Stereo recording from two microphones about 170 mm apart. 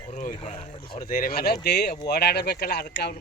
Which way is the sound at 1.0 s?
55° left (ahead or behind).